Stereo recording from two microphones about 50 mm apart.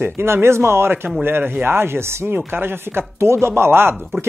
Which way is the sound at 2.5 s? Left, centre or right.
Right.